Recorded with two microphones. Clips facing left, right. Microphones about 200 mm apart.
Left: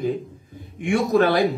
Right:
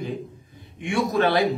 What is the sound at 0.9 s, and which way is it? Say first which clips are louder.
Speech: left 3 dB; 45° left (ahead or behind).